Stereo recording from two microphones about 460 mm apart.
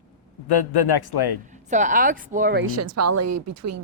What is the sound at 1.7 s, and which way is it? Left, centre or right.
Speech, centre.